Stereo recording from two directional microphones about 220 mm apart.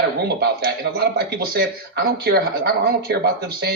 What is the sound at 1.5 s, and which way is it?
Speech, 45° right (ahead or behind).